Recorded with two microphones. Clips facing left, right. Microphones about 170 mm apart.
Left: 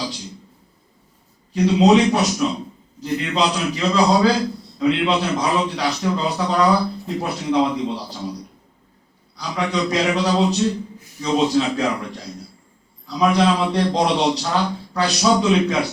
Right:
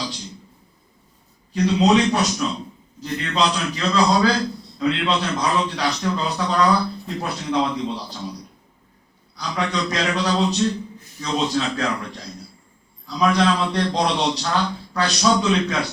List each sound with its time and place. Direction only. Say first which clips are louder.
0.0 s a sound: left 2 dB; 10° left (ahead or behind)
1.5 s a man's voice: left 3 dB; 10° left (ahead or behind)
9.4 s a man's voice: left 2 dB; 10° left (ahead or behind)